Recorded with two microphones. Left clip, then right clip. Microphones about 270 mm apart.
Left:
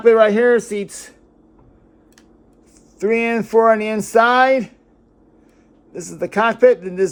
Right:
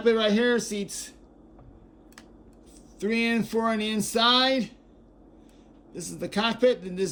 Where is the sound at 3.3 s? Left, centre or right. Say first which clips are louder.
Left 13 dB; centre.